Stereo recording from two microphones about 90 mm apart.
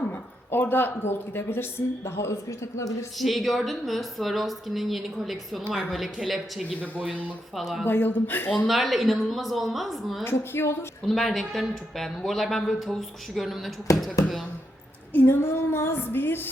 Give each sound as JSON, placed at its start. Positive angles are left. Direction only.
{"t": 0.1, "sound": "a man's voice", "side_deg": 20}
{"t": 3.2, "sound": "speech", "side_deg": 0}
{"t": 7.1, "sound": "speech", "side_deg": -15}
{"t": 7.5, "sound": "speech", "side_deg": 0}
{"t": 7.9, "sound": "female singing", "side_deg": 25}
{"t": 8.6, "sound": "speech", "side_deg": 0}
{"t": 10.2, "sound": "female singing", "side_deg": 25}
{"t": 11.0, "sound": "speech", "side_deg": 0}
{"t": 15.1, "sound": "female singing", "side_deg": 25}